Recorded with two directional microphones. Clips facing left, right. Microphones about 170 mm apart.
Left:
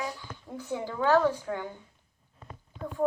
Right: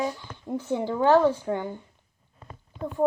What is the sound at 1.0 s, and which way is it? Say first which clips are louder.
Speech: right 4 dB; 20° right (ahead or behind).